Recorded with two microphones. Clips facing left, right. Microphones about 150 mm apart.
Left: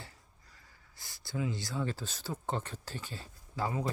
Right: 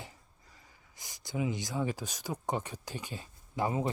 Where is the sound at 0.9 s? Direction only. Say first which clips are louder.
Right 2 dB; 15° right (ahead or behind).